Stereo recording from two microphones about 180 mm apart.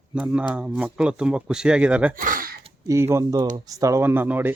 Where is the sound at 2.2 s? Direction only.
50° right (ahead or behind).